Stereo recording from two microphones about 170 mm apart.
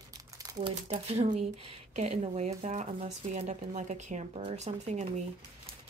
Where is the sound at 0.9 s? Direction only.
40° right (ahead or behind).